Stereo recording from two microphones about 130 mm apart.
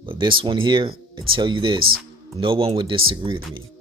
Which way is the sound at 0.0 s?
40° right (ahead or behind).